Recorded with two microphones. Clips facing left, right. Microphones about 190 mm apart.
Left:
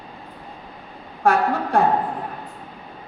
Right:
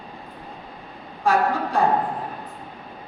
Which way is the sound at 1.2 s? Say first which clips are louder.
Left 2 dB; 55° left (ahead or behind).